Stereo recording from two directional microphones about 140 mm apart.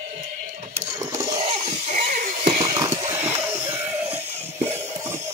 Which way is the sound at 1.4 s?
60° right (ahead or behind).